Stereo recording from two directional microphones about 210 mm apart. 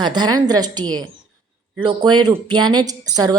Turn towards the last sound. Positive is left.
turn(degrees=-20)  # may be behind; listen again after turning